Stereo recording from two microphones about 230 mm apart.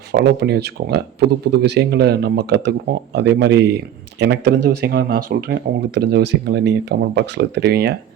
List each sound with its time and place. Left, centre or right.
0.1 s speech: right